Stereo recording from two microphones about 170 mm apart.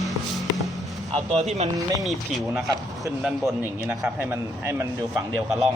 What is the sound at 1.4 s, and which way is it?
Speech, 40° right (ahead or behind).